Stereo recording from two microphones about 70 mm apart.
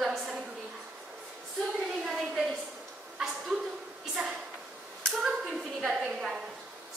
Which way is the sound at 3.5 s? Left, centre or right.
Centre.